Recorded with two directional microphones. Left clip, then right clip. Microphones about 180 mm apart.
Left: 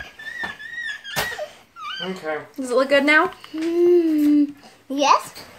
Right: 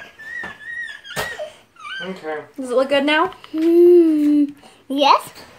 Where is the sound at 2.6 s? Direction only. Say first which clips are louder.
Even; centre (ahead or behind).